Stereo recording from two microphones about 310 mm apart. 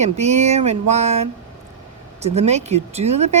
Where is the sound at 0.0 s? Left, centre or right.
Right.